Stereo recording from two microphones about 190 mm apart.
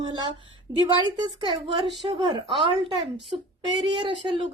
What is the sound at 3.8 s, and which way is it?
Speech, 25° right (ahead or behind).